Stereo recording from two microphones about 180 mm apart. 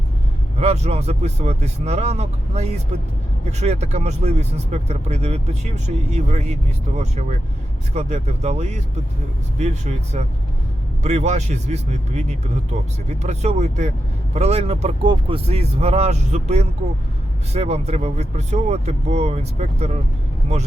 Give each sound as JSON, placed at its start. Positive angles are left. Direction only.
{"t": 0.6, "sound": "speech", "side_deg": -35}